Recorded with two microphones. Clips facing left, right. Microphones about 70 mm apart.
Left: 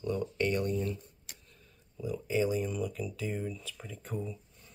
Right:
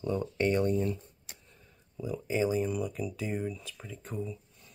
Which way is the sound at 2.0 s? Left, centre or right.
Centre.